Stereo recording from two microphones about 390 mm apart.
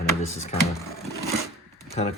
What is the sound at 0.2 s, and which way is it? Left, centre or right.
Drawer open or close, centre.